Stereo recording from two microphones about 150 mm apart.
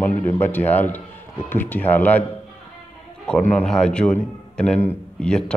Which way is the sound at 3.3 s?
10° left (ahead or behind).